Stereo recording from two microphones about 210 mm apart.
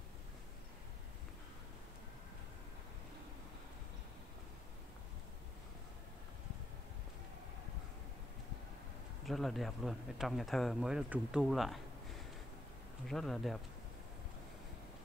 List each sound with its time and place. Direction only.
9.2 s speech: centre (ahead or behind)
13.0 s speech: centre (ahead or behind)